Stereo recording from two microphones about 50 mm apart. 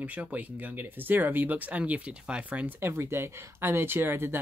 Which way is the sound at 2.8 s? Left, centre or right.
Right.